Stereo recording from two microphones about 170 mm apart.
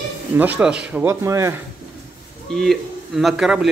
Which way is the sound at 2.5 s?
Centre (ahead or behind).